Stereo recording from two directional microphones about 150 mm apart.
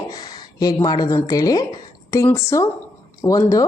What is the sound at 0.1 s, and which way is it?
A woman's voice, 25° left (ahead or behind).